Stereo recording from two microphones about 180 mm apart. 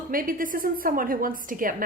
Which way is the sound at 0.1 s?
50° right (ahead or behind).